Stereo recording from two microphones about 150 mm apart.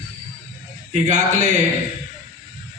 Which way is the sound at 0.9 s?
55° right (ahead or behind).